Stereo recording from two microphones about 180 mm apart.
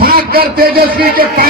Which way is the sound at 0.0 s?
55° right (ahead or behind).